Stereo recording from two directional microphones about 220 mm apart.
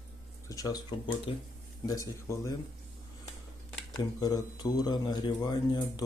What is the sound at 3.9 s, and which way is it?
Speech, 15° left (ahead or behind).